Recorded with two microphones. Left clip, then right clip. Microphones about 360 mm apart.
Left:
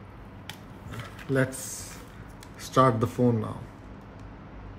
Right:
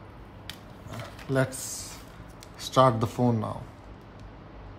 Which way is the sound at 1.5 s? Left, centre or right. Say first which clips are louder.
Even; centre.